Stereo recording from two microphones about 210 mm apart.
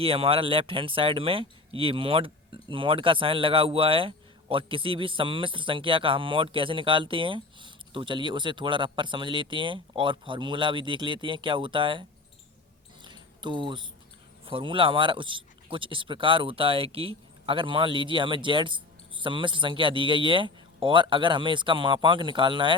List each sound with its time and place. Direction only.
0.0 s speech: 25° right (ahead or behind)
13.0 s a sound: 20° right (ahead or behind)
14.4 s speech: 25° right (ahead or behind)